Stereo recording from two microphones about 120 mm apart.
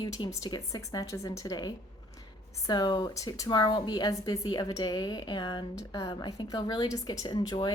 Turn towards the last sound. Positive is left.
turn(degrees=35)  # may be behind; listen again after turning